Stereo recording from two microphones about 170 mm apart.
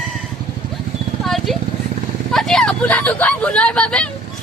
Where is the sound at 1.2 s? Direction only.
Centre (ahead or behind).